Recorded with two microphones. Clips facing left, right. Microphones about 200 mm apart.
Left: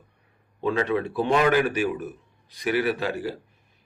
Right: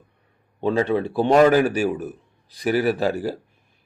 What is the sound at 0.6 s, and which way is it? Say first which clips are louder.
A man's voice: right 3 dB; 30° right (ahead or behind).